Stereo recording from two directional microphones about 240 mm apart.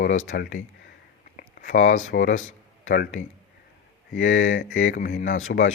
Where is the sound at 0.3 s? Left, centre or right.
Left.